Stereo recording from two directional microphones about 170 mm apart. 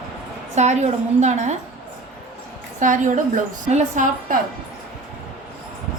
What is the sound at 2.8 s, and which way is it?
A woman's voice, 50° right (ahead or behind).